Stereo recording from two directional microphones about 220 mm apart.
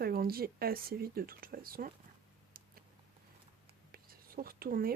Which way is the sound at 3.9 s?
40° right (ahead or behind).